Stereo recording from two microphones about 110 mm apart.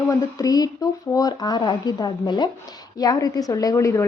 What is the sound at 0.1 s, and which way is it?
Speech, 30° left (ahead or behind).